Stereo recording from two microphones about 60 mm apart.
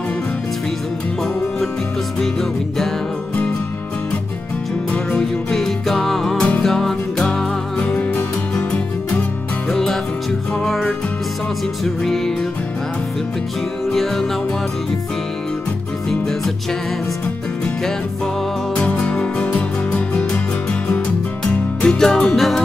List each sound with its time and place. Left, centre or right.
5.5 s music: centre
9.7 s music: centre
13.8 s music: centre
16.1 s music: centre
18.8 s music: centre
21.8 s music: centre